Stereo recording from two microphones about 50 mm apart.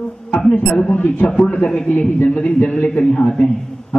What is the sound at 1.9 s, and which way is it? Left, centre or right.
Speech, left.